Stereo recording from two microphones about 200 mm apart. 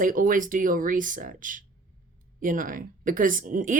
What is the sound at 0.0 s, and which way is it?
A woman's voice, 45° right (ahead or behind).